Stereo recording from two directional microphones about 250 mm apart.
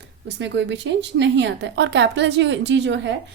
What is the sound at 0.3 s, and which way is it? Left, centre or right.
A woman's voice, right.